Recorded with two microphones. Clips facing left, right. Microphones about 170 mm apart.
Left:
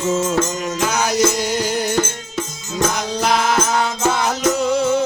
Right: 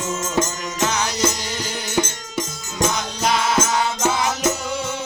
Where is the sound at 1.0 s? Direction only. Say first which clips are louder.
Left 6 dB; 50° left (ahead or behind).